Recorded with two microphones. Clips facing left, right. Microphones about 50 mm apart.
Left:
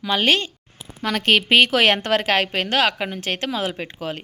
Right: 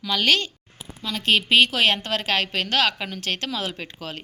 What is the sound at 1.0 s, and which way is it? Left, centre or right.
A woman's voice, left.